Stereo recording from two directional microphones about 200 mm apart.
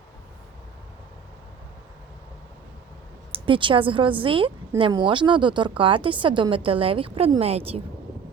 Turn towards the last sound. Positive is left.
turn(degrees=-30)  # may be behind; listen again after turning